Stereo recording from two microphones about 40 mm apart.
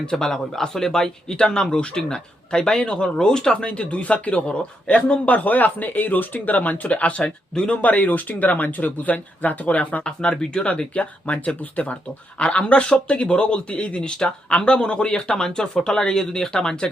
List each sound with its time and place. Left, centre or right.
0.0 s a man's voice: centre; by 7.2 s left
7.2 s speech: centre
7.8 s speech: left
10.0 s a man's voice: left
10.9 s a man's voice: left; by 16.9 s centre